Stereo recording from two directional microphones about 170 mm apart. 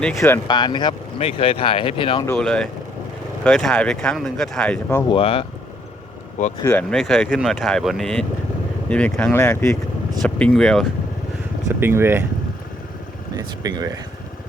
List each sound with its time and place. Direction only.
0.4 s speech: 25° left (ahead or behind)
2.2 s speech: 10° left (ahead or behind)
5.0 s speech: 30° left (ahead or behind)
6.6 s speech: 10° left (ahead or behind)
6.9 s speech: centre (ahead or behind)
11.8 s speech: 15° right (ahead or behind)
13.3 s speech: 20° right (ahead or behind)